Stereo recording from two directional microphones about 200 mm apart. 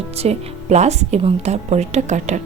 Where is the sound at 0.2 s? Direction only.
35° right (ahead or behind).